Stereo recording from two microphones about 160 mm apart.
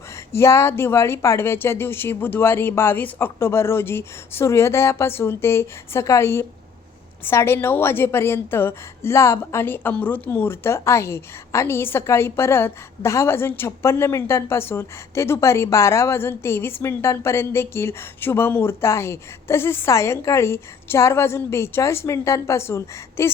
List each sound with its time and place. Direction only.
0.3 s a woman's voice: 15° left (ahead or behind)